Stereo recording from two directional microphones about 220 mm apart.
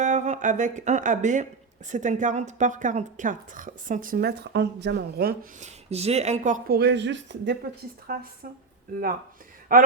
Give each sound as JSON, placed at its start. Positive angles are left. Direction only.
{"t": 0.0, "sound": "a woman's voice", "side_deg": -35}
{"t": 8.0, "sound": "a woman's voice", "side_deg": -45}
{"t": 9.7, "sound": "a woman's voice", "side_deg": -40}